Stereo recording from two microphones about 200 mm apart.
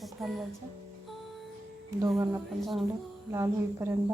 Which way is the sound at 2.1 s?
Centre (ahead or behind).